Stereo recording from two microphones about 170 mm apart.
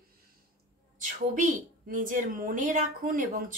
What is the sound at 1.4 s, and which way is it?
A woman's voice, 50° right (ahead or behind).